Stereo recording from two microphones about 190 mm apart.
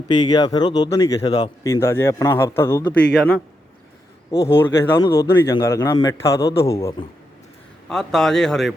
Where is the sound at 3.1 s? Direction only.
5° left (ahead or behind).